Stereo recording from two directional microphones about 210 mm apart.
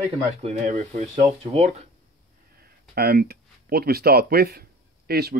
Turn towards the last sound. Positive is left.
turn(degrees=-50)  # may be behind; listen again after turning